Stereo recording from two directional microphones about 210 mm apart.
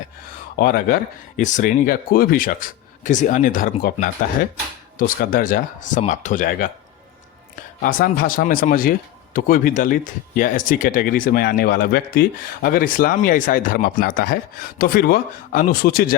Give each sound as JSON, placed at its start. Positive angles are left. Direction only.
{"t": 0.5, "sound": "speech", "side_deg": 45}
{"t": 7.8, "sound": "speech", "side_deg": 40}